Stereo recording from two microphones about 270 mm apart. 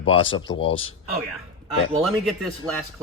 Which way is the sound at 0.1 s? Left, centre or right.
Centre.